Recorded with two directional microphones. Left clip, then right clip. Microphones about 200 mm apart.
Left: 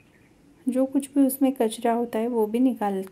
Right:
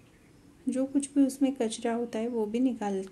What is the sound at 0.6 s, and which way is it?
A woman's voice, 20° left (ahead or behind).